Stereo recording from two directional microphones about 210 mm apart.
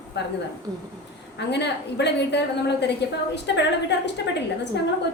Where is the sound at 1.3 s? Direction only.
55° left (ahead or behind).